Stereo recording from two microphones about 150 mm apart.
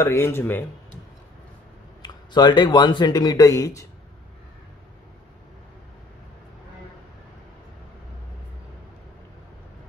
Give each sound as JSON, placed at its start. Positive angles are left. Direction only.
{"t": 0.0, "sound": "speech", "side_deg": 15}
{"t": 2.0, "sound": "speech", "side_deg": 30}